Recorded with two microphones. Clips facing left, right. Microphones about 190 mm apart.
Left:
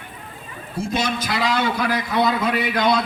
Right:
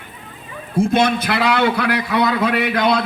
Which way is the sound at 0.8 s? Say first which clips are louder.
Right 8 dB; 55° right (ahead or behind).